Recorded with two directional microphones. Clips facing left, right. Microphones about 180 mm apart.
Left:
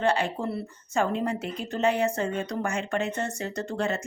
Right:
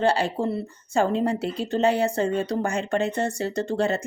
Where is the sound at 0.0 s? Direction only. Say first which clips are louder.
Right 3 dB; 35° right (ahead or behind).